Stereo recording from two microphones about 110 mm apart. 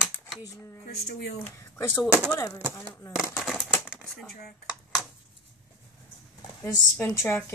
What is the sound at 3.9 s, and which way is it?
Computer keyboard, 5° right (ahead or behind).